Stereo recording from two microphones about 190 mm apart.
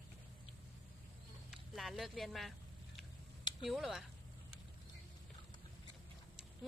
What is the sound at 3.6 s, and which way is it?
Speech, centre (ahead or behind).